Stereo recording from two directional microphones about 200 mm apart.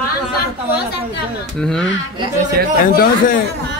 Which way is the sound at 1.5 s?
5° left (ahead or behind).